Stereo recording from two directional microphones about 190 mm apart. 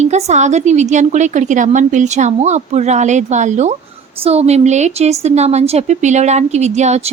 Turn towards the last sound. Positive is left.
turn(degrees=-35)  # may be behind; listen again after turning